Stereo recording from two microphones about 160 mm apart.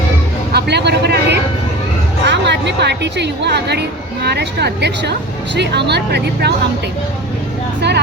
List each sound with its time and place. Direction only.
0.5 s a woman's voice: 90° right
7.8 s a woman's voice: 90° right